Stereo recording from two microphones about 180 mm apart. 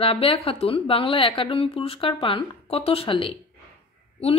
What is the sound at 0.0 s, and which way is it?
A woman's voice, 30° left (ahead or behind).